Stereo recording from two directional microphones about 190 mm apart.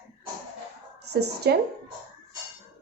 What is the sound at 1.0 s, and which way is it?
Speech, 60° right (ahead or behind).